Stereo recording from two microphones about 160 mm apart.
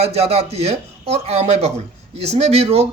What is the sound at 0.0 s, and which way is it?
Speech, 40° right (ahead or behind).